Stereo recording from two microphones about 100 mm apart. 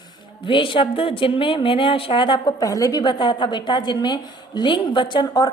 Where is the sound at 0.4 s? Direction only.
55° left (ahead or behind).